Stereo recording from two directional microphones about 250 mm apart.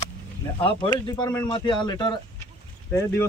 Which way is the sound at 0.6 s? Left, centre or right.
Left.